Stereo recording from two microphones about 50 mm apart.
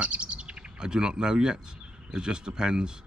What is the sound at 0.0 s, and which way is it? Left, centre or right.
Bird, right.